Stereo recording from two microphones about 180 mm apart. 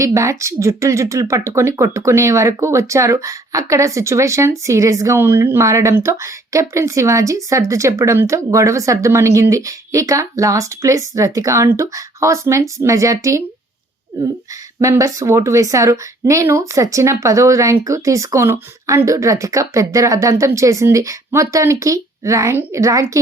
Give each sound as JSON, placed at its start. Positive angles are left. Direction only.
{"t": 0.0, "sound": "a woman's voice", "side_deg": -15}
{"t": 14.8, "sound": "a woman's voice", "side_deg": -15}